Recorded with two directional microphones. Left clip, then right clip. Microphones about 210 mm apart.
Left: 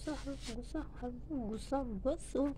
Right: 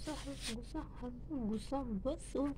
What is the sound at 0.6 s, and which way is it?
A woman's voice, 15° left (ahead or behind).